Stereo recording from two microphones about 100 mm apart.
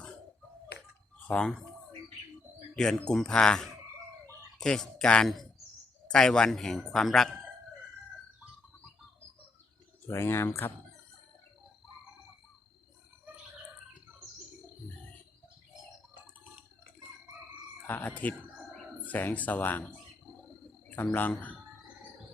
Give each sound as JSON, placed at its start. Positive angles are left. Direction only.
{"t": 1.3, "sound": "speech", "side_deg": 10}
{"t": 2.7, "sound": "speech", "side_deg": 10}
{"t": 10.1, "sound": "speech", "side_deg": 25}
{"t": 17.8, "sound": "frog", "side_deg": 15}
{"t": 19.0, "sound": "speech", "side_deg": 15}
{"t": 20.9, "sound": "speech", "side_deg": 20}